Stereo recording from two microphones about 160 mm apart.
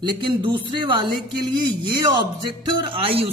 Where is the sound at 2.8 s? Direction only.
30° right (ahead or behind).